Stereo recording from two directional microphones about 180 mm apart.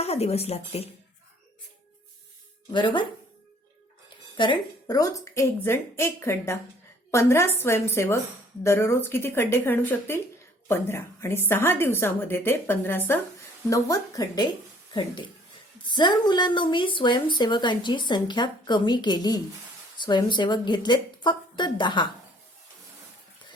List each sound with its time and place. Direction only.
0.0 s speech: 35° left (ahead or behind)
4.4 s a woman's voice: 25° left (ahead or behind)